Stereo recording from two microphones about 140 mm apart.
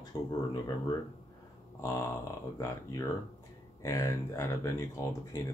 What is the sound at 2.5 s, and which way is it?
Speech, 20° left (ahead or behind).